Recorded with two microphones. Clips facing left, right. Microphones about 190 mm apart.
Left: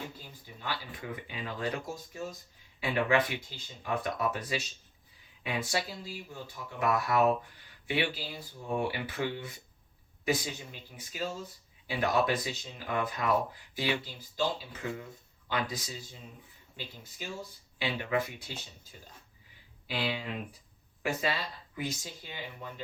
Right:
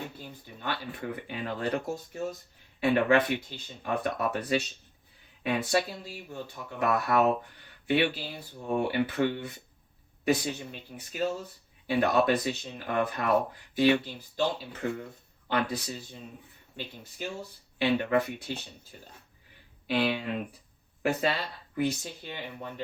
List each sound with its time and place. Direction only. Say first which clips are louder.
0.6 s speech: right 4 dB; 60° right (ahead or behind)